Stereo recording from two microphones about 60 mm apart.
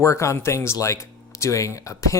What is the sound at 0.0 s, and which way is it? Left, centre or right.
Speech, left.